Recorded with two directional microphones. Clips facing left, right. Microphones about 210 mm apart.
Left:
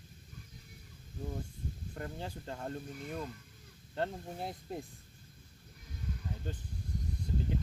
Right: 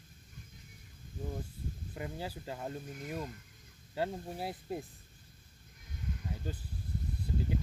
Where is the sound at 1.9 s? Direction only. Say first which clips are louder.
Right 2 dB; 5° right (ahead or behind).